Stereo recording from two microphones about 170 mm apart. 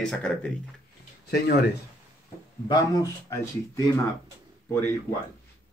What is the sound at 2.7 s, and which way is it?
Speech, 20° left (ahead or behind).